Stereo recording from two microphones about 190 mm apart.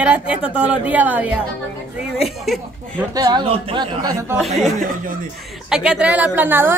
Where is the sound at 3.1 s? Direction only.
20° right (ahead or behind).